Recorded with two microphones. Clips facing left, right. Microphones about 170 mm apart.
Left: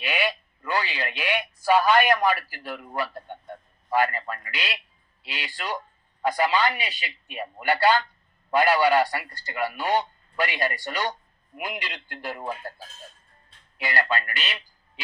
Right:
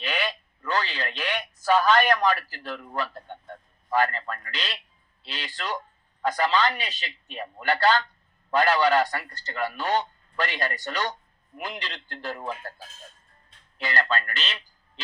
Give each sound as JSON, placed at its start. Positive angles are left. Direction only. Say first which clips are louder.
{"t": 0.0, "sound": "a man's voice", "louder": "left 2 dB", "side_deg": 10}
{"t": 13.7, "sound": "a man's voice", "louder": "left 1 dB", "side_deg": 10}